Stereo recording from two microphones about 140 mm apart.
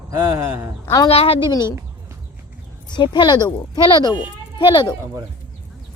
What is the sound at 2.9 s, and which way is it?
A child's voice, 35° left (ahead or behind).